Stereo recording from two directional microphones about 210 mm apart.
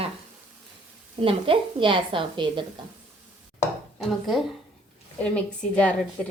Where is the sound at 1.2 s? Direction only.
25° right (ahead or behind).